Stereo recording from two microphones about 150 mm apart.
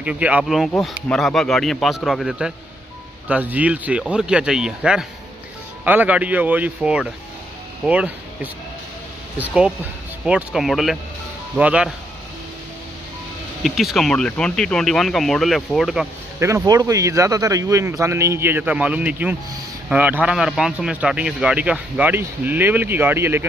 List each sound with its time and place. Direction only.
0.0 s a man's voice: 10° right (ahead or behind)
13.6 s speech: centre (ahead or behind)
16.3 s a man's voice: 20° right (ahead or behind)